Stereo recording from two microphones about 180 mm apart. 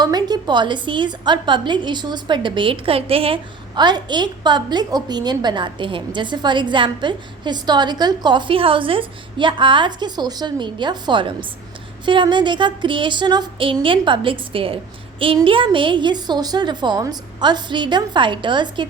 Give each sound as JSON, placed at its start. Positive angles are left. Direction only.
{"t": 0.0, "sound": "a woman's voice", "side_deg": -20}